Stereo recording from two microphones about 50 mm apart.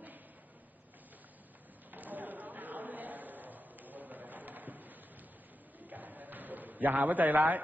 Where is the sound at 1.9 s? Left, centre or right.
Right.